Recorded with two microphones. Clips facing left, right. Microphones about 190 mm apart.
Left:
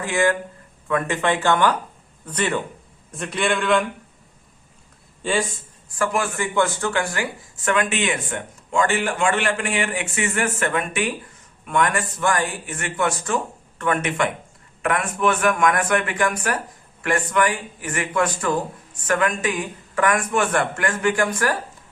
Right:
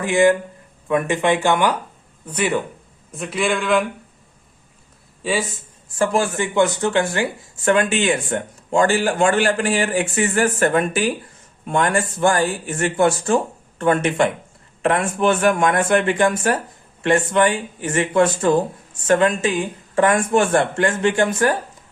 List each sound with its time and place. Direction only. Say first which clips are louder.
0.0 s a man's voice: right 5 dB; 15° right (ahead or behind); by 3.8 s centre (ahead or behind)
5.2 s speech: right 1 dB; centre (ahead or behind)
6.0 s a man's voice: right 4 dB; 25° right (ahead or behind)